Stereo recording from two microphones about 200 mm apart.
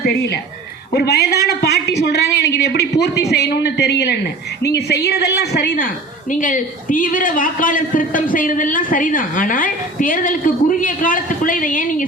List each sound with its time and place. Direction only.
0.9 s a woman's voice: 55° left (ahead or behind)